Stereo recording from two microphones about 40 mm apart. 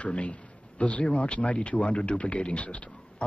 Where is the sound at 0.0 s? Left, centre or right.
Left.